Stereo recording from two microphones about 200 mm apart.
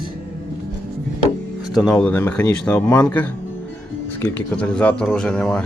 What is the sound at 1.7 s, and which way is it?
Speech, 5° left (ahead or behind).